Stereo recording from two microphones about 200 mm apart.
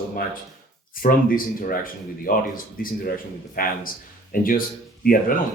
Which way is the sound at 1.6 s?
45° left (ahead or behind).